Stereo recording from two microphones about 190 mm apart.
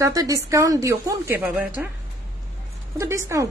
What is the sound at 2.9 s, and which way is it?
Speech, 15° right (ahead or behind).